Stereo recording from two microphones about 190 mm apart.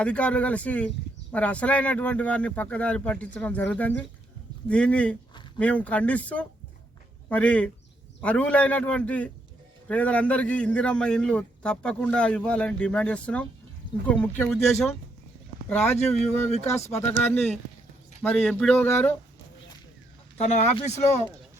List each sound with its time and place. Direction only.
0.0 s a man's voice: 5° left (ahead or behind)
16.0 s speech: 35° left (ahead or behind)
17.2 s a man's voice: 5° left (ahead or behind)
20.4 s speech: 35° left (ahead or behind)